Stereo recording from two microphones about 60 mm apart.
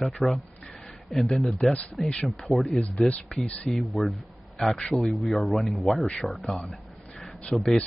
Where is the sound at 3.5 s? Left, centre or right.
Centre.